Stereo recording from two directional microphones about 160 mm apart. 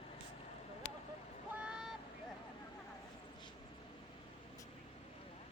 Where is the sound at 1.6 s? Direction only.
5° right (ahead or behind).